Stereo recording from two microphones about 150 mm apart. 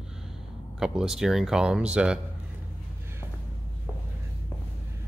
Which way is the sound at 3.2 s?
15° left (ahead or behind).